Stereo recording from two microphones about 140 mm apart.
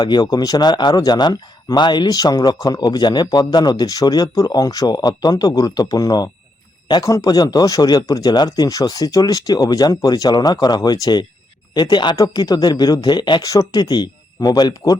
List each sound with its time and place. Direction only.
0.0 s speech: 30° left (ahead or behind)